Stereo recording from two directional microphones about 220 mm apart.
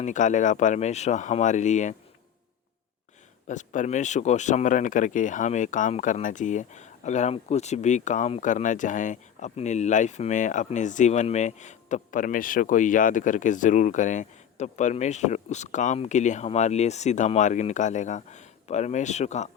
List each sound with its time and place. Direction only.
0.0 s speech: 35° left (ahead or behind)
3.4 s speech: 35° left (ahead or behind)